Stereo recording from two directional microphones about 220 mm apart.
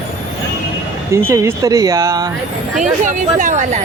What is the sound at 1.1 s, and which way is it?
Speech, 15° right (ahead or behind).